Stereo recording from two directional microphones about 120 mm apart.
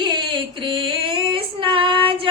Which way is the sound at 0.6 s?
45° right (ahead or behind).